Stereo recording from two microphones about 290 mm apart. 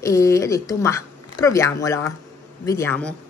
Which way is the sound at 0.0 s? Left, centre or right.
Centre.